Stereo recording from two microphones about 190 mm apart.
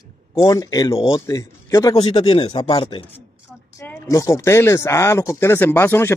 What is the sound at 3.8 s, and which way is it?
Speech, 15° left (ahead or behind).